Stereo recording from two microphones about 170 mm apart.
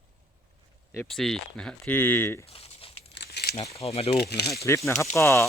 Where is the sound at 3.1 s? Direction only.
75° left (ahead or behind).